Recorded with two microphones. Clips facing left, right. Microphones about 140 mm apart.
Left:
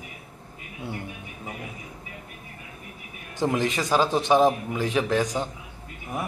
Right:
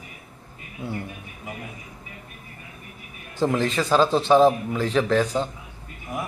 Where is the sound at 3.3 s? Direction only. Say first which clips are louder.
Right 2 dB; 15° left (ahead or behind).